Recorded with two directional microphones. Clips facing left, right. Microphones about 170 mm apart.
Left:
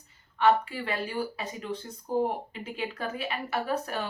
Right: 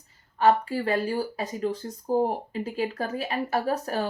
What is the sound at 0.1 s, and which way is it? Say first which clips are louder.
Speech: right 2 dB; 40° right (ahead or behind).